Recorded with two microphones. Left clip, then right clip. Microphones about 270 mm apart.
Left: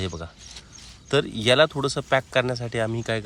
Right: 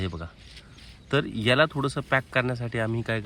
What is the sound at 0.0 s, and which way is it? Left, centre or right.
Speech, centre.